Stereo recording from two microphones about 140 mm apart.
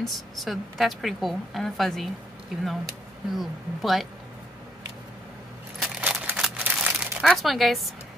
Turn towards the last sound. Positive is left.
turn(degrees=0)  # may be behind; listen again after turning